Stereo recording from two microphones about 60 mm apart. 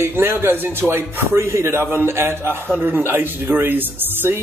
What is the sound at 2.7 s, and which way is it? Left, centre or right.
Speech, right.